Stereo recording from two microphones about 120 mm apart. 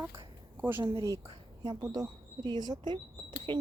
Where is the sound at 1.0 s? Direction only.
30° right (ahead or behind).